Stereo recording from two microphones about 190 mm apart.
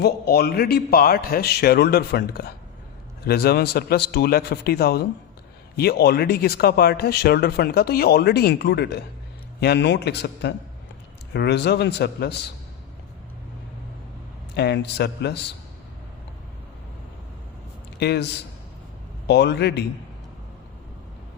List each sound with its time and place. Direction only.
0.0 s speech: 55° left (ahead or behind)
14.5 s speech: 60° left (ahead or behind)
18.0 s speech: 60° left (ahead or behind)
19.3 s speech: 65° left (ahead or behind)